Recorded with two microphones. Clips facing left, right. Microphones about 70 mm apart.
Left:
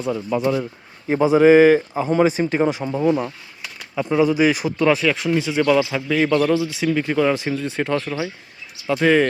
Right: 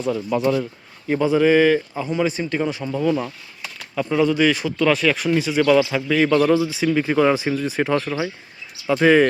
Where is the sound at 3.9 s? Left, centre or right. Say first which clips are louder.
Left 1 dB; centre.